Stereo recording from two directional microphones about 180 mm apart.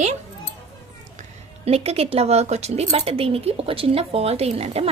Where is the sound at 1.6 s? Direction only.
35° right (ahead or behind).